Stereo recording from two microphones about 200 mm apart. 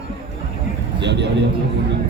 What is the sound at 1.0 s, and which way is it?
Speech, 60° right (ahead or behind).